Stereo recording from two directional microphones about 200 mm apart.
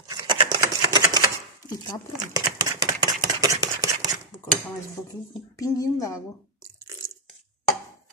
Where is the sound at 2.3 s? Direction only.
15° right (ahead or behind).